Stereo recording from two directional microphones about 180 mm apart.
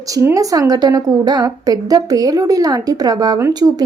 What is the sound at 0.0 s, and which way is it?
A woman's voice, 15° right (ahead or behind).